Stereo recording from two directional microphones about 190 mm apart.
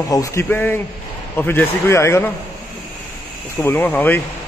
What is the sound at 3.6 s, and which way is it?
Speech, 10° left (ahead or behind).